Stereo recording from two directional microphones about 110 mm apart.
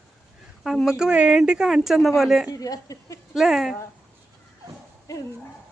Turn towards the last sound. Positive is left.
turn(degrees=0)  # may be behind; listen again after turning